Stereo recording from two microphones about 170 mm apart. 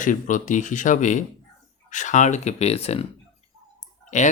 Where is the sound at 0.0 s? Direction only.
50° left (ahead or behind).